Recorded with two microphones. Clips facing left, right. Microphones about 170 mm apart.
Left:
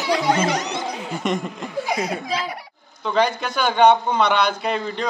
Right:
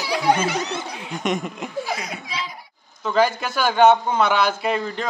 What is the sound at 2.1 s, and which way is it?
Speech, 50° left (ahead or behind).